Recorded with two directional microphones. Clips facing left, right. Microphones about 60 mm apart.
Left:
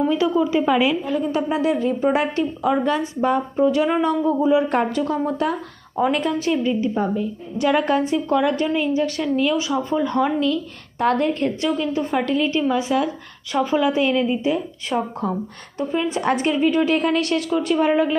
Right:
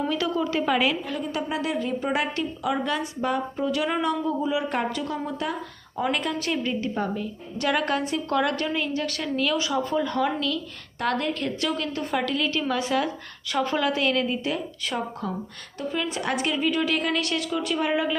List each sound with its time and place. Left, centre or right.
0.1 s a woman's voice: centre
1.2 s a woman's voice: left
11.8 s a woman's voice: centre
12.5 s a woman's voice: centre
14.9 s a woman's voice: left